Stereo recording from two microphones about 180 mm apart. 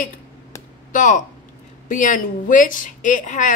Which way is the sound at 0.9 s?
45° left (ahead or behind).